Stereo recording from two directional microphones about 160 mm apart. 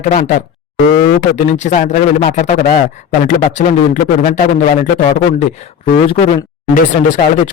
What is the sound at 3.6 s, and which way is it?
Speech, 45° left (ahead or behind).